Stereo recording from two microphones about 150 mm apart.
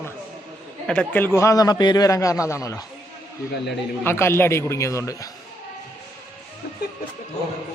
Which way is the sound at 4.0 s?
15° left (ahead or behind).